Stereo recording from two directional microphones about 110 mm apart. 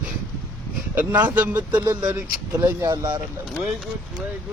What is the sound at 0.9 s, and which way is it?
Speech, 15° right (ahead or behind).